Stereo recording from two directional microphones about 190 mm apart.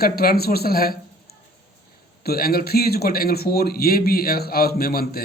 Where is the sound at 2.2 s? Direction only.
55° left (ahead or behind).